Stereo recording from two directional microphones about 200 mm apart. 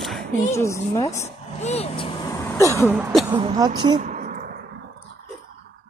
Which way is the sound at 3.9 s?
40° right (ahead or behind).